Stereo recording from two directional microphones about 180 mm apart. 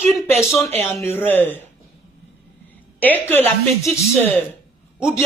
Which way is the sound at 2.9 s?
10° left (ahead or behind).